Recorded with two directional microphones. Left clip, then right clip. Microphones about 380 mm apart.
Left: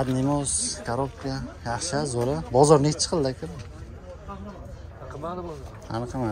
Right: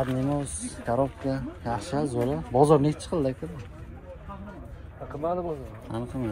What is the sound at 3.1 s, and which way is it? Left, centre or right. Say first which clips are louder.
Speech: left 2 dB; centre.